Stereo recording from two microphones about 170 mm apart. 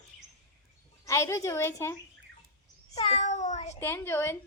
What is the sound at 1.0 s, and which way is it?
Speech, 15° left (ahead or behind).